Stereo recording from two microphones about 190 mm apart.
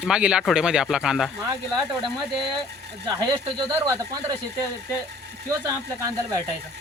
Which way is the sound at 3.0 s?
20° right (ahead or behind).